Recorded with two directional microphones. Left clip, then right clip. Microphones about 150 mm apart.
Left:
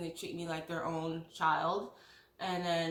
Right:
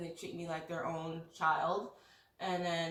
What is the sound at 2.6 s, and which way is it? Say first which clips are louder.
Speech: left 4 dB; 20° left (ahead or behind).